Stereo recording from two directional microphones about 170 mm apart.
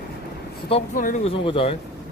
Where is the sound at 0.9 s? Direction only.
50° left (ahead or behind).